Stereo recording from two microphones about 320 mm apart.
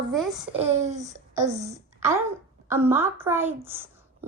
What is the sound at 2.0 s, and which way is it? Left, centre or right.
A child's voice, centre.